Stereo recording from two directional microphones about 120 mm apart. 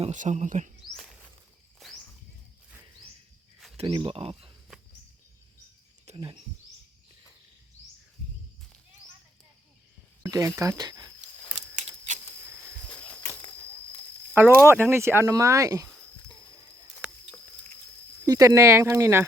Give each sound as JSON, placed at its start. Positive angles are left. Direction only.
{"t": 0.1, "sound": "speech", "side_deg": -85}
{"t": 3.8, "sound": "speech", "side_deg": -45}
{"t": 6.1, "sound": "cricket", "side_deg": -65}
{"t": 10.2, "sound": "speech", "side_deg": -25}
{"t": 10.8, "sound": "a sound", "side_deg": -35}
{"t": 14.3, "sound": "speech", "side_deg": -20}
{"t": 18.3, "sound": "speech", "side_deg": -25}